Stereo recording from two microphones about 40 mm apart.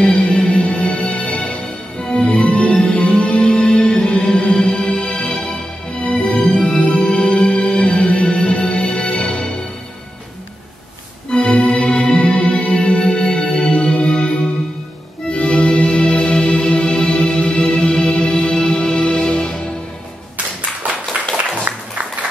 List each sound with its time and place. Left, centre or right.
0.1 s music: left
2.0 s music: left
11.2 s organ: left
13.1 s music: left
21.7 s music: right